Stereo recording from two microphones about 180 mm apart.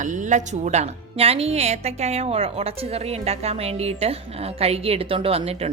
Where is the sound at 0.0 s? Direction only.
45° right (ahead or behind).